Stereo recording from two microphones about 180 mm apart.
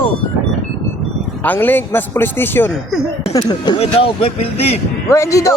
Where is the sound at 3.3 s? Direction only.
20° left (ahead or behind).